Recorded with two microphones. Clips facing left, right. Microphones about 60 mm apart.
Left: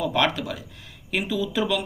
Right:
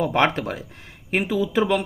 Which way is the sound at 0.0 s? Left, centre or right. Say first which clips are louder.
Right 3 dB; right.